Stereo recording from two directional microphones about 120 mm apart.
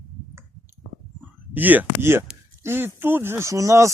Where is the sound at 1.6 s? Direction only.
15° right (ahead or behind).